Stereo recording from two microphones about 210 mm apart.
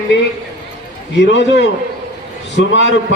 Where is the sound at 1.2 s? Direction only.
60° left (ahead or behind).